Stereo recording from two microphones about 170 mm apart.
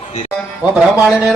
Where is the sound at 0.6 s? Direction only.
5° right (ahead or behind).